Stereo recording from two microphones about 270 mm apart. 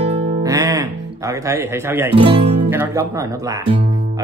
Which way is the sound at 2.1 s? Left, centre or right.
Centre.